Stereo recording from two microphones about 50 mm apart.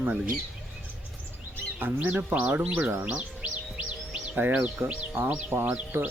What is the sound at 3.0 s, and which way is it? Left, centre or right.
Music, right.